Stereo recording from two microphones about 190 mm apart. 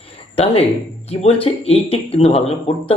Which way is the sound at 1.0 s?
30° left (ahead or behind).